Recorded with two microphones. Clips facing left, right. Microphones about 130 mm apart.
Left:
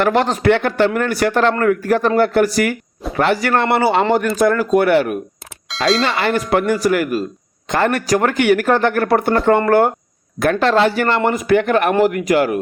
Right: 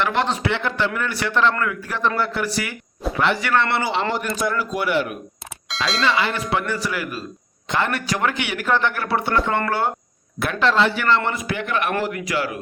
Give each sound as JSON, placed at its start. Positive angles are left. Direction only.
{"t": 0.0, "sound": "speech", "side_deg": 45}
{"t": 5.6, "sound": "a sound", "side_deg": 0}
{"t": 6.0, "sound": "speech", "side_deg": 50}